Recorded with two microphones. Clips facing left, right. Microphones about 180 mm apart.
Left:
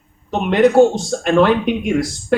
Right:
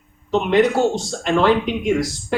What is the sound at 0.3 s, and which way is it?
Speech, 55° left (ahead or behind).